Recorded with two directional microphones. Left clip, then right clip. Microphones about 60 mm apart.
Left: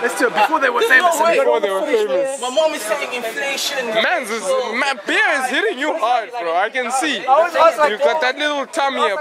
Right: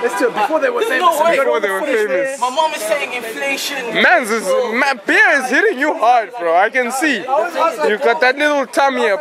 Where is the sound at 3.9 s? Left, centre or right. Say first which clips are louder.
Right 6 dB; right.